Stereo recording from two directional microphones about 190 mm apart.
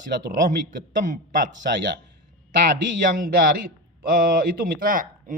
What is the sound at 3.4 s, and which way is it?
Speech, 50° right (ahead or behind).